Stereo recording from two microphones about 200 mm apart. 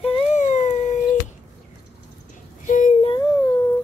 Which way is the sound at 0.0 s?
30° left (ahead or behind).